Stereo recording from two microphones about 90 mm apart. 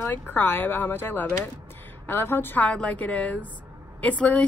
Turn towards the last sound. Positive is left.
turn(degrees=15)  # may be behind; listen again after turning